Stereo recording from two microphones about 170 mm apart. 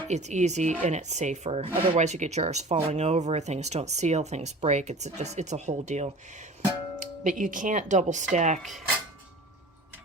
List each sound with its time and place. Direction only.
0.1 s speech: 45° right (ahead or behind)